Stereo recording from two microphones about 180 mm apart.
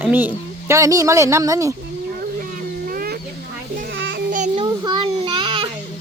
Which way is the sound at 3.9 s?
85° right.